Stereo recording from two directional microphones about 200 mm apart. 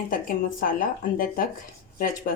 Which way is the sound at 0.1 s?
45° left (ahead or behind).